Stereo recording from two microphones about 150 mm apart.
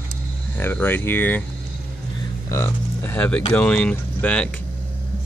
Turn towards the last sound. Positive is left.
turn(degrees=5)  # may be behind; listen again after turning